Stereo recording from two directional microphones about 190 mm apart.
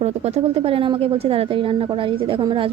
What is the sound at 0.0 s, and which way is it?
A woman's voice, 35° right (ahead or behind).